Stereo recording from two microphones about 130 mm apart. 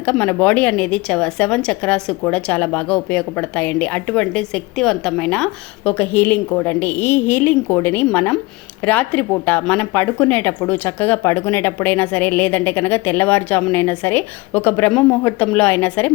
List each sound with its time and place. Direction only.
0.0 s a woman's voice: 10° left (ahead or behind)